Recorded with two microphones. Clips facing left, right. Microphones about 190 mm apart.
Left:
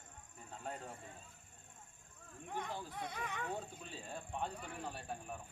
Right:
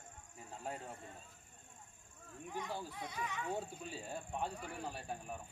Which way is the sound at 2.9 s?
55° left (ahead or behind).